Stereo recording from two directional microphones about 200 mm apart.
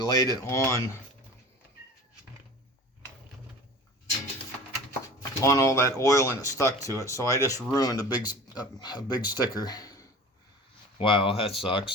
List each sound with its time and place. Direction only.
0.0 s speech: 20° left (ahead or behind)
5.4 s speech: 15° left (ahead or behind)